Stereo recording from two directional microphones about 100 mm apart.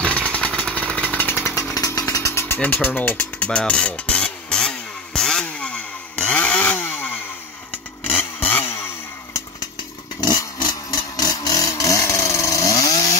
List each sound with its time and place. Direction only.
0.0 s engine: 10° left (ahead or behind)
1.4 s chainsaw: 30° left (ahead or behind); by 7.2 s 15° left (ahead or behind)
8.2 s chainsaw: 20° left (ahead or behind)
10.2 s a sound: 45° left (ahead or behind)